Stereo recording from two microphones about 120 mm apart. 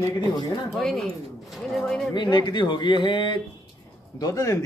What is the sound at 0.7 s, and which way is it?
Speech, centre (ahead or behind).